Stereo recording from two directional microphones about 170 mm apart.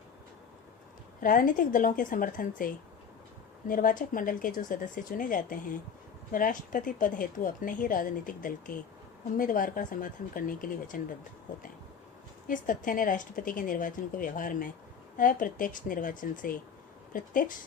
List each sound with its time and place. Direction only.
1.2 s a woman's voice: 55° left (ahead or behind)
12.5 s a woman's voice: 50° left (ahead or behind)